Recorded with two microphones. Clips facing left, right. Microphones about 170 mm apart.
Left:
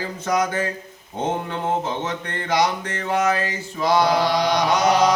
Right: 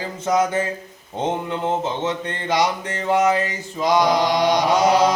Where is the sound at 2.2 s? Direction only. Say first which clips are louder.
Left 2 dB; 20° right (ahead or behind).